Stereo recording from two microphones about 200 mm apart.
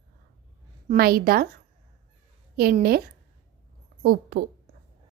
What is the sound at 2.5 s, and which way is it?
A woman's voice, 50° right (ahead or behind).